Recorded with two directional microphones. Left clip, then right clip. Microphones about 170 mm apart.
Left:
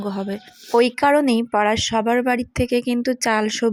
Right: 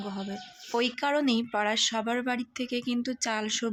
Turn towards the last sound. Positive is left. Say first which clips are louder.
# left 10 dB
turn(degrees=35)  # may be behind; listen again after turning